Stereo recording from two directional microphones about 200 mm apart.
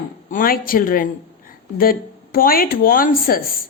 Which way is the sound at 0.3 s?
45° left (ahead or behind).